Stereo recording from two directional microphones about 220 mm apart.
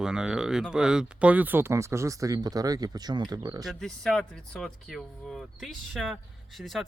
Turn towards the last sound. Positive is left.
turn(degrees=0)  # may be behind; listen again after turning